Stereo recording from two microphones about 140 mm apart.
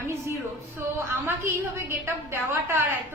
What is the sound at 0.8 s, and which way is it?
A woman's voice, 15° right (ahead or behind).